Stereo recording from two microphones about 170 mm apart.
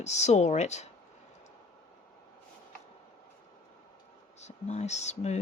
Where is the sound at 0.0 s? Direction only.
40° left (ahead or behind).